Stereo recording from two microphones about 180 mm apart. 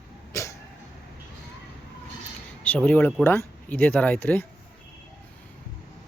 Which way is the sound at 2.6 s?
10° left (ahead or behind).